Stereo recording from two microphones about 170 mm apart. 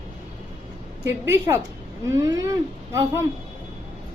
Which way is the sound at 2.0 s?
20° right (ahead or behind).